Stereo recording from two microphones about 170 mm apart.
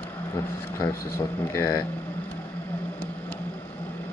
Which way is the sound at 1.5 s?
15° left (ahead or behind).